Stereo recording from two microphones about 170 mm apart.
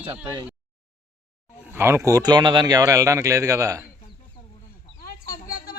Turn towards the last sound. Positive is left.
turn(degrees=55)  # may be behind; listen again after turning